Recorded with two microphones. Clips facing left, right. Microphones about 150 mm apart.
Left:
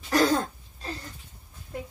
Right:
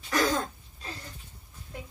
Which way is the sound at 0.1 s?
40° left (ahead or behind).